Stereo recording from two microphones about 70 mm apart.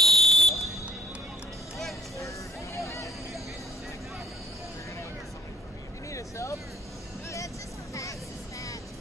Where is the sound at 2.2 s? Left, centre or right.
Left.